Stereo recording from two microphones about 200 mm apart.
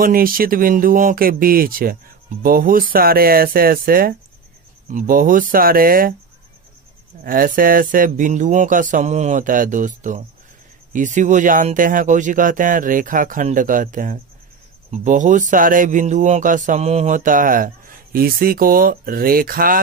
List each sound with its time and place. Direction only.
0.0 s speech: 45° right (ahead or behind)
7.2 s speech: 45° right (ahead or behind)